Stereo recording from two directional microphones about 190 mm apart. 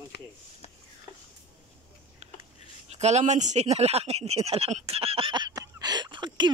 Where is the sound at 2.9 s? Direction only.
35° right (ahead or behind).